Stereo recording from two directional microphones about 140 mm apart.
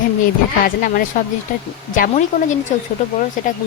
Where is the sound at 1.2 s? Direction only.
90° left.